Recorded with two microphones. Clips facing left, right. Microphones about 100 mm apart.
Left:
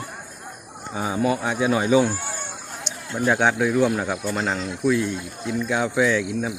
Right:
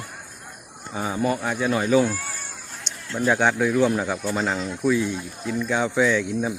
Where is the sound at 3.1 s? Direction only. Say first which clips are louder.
Even; 10° left (ahead or behind).